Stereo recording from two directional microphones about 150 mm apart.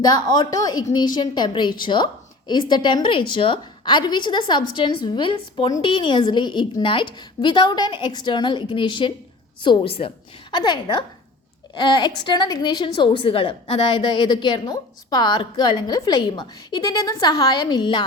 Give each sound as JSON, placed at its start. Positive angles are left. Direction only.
{"t": 0.0, "sound": "a woman's voice", "side_deg": 25}